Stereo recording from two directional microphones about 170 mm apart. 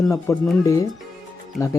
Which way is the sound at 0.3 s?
20° left (ahead or behind).